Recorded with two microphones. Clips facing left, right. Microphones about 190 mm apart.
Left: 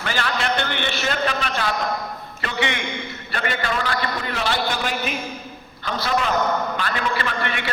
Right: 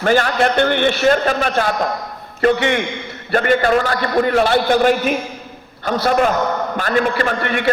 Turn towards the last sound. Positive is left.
turn(degrees=-50)  # may be behind; listen again after turning